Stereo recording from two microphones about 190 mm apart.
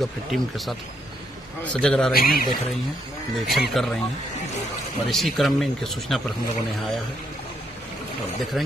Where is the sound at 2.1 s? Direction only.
50° left (ahead or behind).